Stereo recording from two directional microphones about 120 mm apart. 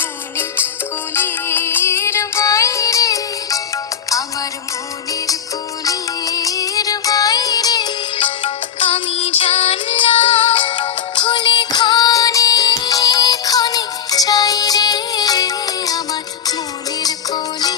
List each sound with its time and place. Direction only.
0.0 s music: 20° left (ahead or behind)
5.8 s music: 30° left (ahead or behind)
17.0 s music: 35° left (ahead or behind)